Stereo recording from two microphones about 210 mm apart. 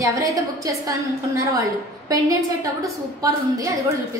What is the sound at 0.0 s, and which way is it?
A woman's voice, 15° right (ahead or behind).